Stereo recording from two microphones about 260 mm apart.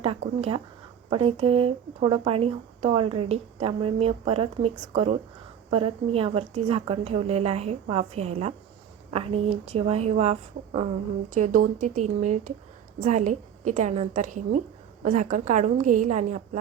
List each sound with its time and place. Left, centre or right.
0.0 s speech: right